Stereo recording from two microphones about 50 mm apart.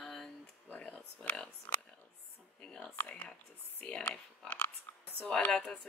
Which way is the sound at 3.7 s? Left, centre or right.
Left.